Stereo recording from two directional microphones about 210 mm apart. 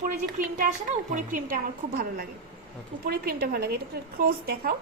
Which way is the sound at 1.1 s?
40° right (ahead or behind).